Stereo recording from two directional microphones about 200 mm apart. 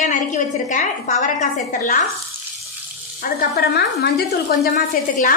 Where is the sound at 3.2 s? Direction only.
45° left (ahead or behind).